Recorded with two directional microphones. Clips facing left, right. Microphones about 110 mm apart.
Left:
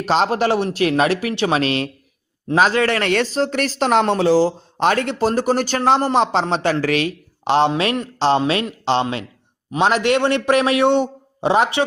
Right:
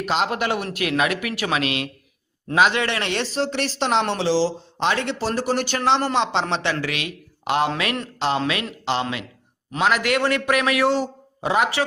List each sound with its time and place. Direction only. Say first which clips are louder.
0.0 s a man's voice: left 5 dB; 35° left (ahead or behind)